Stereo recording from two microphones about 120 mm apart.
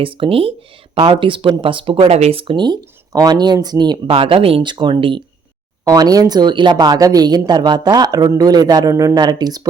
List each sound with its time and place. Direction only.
0.0 s speech: 50° right (ahead or behind)
2.1 s speech: 55° right (ahead or behind); by 4.1 s 35° right (ahead or behind)
4.1 s speech: 50° right (ahead or behind)
5.8 s speech: 30° right (ahead or behind)